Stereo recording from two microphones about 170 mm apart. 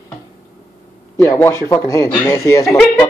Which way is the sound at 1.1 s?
15° left (ahead or behind).